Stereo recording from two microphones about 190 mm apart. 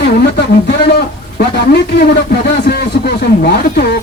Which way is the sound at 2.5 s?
60° left (ahead or behind).